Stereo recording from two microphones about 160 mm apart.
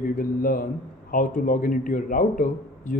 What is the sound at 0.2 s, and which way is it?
A man's voice, 60° left (ahead or behind).